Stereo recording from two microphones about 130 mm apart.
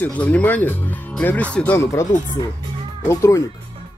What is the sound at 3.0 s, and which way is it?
Speech, 25° left (ahead or behind).